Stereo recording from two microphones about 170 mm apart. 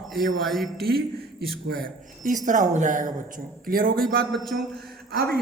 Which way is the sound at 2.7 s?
50° right (ahead or behind).